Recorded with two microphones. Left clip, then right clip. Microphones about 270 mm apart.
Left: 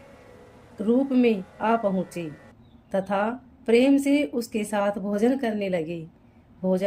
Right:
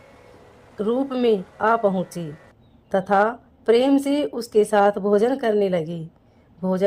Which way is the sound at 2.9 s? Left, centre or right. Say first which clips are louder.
Right 7 dB; right.